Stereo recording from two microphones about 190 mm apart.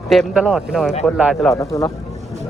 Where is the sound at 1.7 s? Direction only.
15° left (ahead or behind).